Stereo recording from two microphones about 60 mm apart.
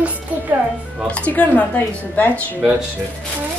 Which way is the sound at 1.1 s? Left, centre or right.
Left.